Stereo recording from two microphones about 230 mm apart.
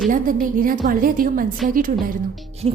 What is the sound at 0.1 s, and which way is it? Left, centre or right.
A woman's voice, right.